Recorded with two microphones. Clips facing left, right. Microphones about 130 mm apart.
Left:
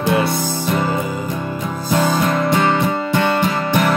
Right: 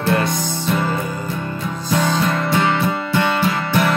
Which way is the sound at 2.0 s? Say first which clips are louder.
Left 2 dB; 10° left (ahead or behind).